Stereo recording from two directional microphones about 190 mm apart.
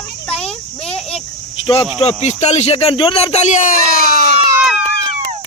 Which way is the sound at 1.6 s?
30° left (ahead or behind).